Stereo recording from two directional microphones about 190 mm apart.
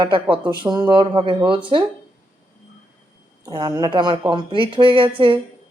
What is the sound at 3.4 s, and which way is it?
Speech, 20° right (ahead or behind).